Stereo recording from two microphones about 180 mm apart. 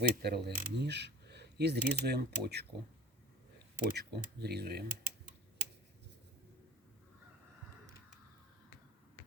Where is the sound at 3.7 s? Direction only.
60° right (ahead or behind).